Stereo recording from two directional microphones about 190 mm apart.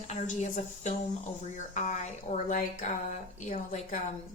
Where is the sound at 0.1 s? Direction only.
35° left (ahead or behind).